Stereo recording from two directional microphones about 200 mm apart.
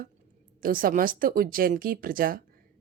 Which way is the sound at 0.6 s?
45° right (ahead or behind).